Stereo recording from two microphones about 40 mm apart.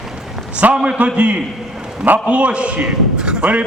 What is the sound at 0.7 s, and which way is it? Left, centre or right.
A man's voice, right.